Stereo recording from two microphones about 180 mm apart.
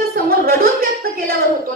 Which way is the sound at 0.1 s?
55° right (ahead or behind).